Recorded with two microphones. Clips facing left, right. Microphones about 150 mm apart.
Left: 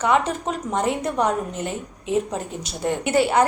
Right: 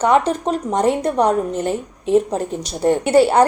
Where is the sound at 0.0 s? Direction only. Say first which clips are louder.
Right 5 dB; 35° right (ahead or behind).